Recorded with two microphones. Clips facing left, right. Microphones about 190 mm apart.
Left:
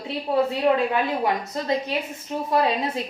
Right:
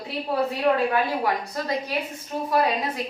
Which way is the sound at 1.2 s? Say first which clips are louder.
Left 1 dB; 20° left (ahead or behind).